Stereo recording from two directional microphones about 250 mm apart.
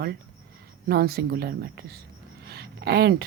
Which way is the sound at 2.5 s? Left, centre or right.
Right.